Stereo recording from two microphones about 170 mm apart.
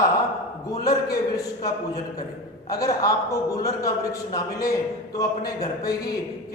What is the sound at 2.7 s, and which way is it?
A man's voice, 20° left (ahead or behind).